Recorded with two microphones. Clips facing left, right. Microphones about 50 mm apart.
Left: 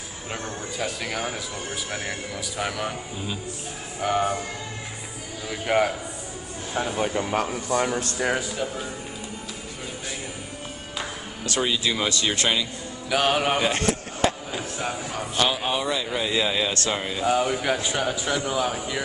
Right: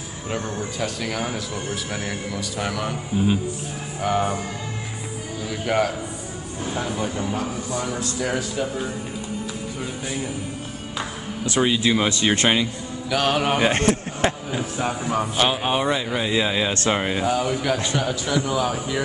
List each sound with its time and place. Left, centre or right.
0.3 s a man's voice: centre
4.0 s speech: centre
5.5 s a man's voice: centre
7.2 s a man's voice: left
11.4 s a man's voice: centre
13.1 s speech: centre
13.6 s a man's voice: right
14.5 s speech: centre
15.0 s a man's voice: right
16.1 s speech: centre
16.7 s a man's voice: right
17.3 s a man's voice: centre